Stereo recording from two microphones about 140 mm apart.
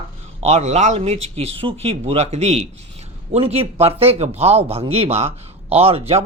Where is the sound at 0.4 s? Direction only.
50° right (ahead or behind).